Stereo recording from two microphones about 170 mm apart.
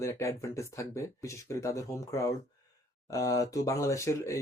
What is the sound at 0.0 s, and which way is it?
Speech, 20° left (ahead or behind).